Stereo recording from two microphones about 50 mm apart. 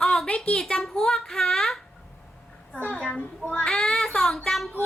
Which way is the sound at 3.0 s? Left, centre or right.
Centre.